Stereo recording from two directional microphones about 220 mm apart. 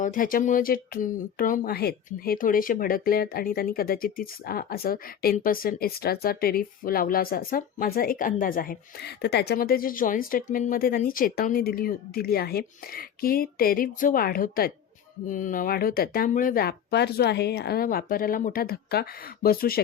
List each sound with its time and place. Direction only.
0.0 s speech: 35° left (ahead or behind)